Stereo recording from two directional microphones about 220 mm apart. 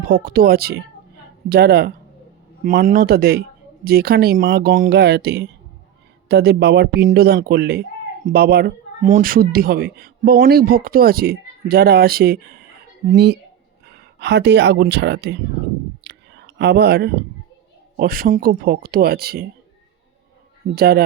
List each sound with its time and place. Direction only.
0.1 s speech: 40° right (ahead or behind)
13.8 s speech: 45° right (ahead or behind)
16.0 s whispering: 50° right (ahead or behind)
17.9 s speech: 40° right (ahead or behind)
20.7 s speech: 45° right (ahead or behind)